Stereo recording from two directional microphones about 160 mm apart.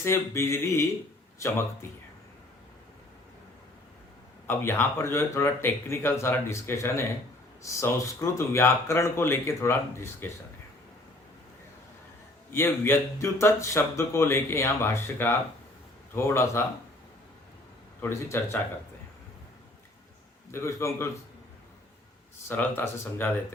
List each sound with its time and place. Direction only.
0.0 s speech: 15° left (ahead or behind)
4.4 s speech: 15° left (ahead or behind)
12.5 s speech: 15° left (ahead or behind)
18.0 s speech: 15° left (ahead or behind)
20.5 s speech: 20° left (ahead or behind)
22.4 s speech: 15° left (ahead or behind)